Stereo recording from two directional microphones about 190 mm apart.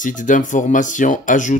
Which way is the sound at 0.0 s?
45° left (ahead or behind).